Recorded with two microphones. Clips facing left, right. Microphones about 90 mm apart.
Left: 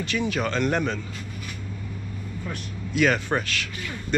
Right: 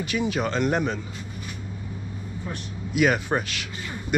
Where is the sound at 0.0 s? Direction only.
10° right (ahead or behind).